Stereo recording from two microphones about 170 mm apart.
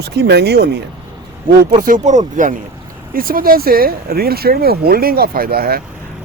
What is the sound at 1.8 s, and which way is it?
Speech, 45° right (ahead or behind).